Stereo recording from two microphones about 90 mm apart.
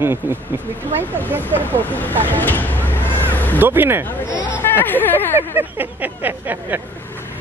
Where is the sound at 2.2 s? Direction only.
20° left (ahead or behind).